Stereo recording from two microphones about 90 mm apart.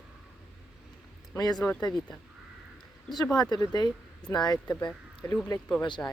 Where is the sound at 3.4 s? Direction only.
50° left (ahead or behind).